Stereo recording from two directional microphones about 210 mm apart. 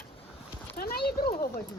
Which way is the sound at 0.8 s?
45° left (ahead or behind).